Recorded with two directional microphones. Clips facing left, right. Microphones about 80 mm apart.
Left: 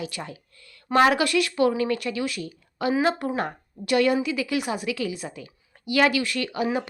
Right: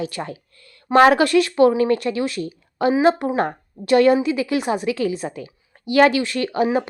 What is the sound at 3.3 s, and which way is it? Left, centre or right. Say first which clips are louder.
A woman's voice: right 7 dB; right.